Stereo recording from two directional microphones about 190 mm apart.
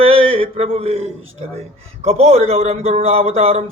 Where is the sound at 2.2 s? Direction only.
35° right (ahead or behind).